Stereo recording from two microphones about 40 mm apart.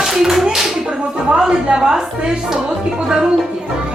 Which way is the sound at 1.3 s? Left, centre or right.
Centre.